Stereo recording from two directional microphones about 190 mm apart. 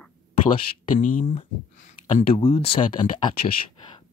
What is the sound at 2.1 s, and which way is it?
Speech, 30° left (ahead or behind).